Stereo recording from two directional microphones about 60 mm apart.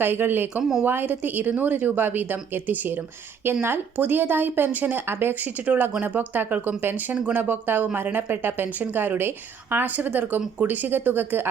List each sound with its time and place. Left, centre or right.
0.0 s a woman's voice: right
0.6 s speech: centre
0.9 s a woman's voice: right